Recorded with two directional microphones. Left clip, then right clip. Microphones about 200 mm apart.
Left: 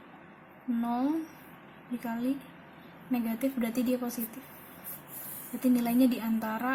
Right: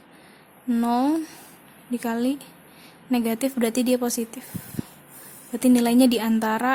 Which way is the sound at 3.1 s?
40° right (ahead or behind).